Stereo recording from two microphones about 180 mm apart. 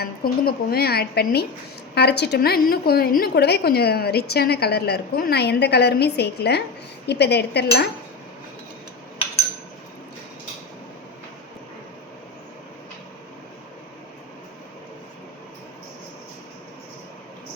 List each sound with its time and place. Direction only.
0.0 s a woman's voice: 60° left (ahead or behind)